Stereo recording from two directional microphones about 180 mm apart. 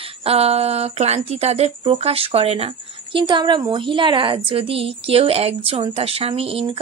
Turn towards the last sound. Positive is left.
turn(degrees=-30)  # may be behind; listen again after turning